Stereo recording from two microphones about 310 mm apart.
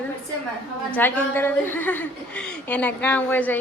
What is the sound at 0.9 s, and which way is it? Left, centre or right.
A woman's voice, centre.